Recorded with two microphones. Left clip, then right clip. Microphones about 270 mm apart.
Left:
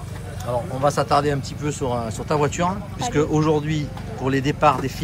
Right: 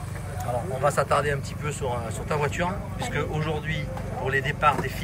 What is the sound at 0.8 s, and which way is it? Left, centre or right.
Speech, centre.